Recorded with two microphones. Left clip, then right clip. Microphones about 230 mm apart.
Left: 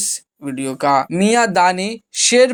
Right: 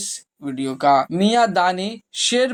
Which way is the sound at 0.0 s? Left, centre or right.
Left.